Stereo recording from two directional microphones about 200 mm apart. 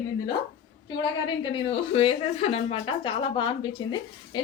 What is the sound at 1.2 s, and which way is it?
Speech, 25° left (ahead or behind).